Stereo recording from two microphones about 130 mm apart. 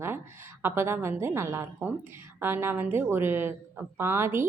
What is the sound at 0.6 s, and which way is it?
A woman's voice, 15° right (ahead or behind).